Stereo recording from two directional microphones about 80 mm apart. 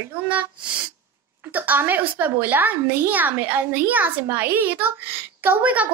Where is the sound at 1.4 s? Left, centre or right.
Right.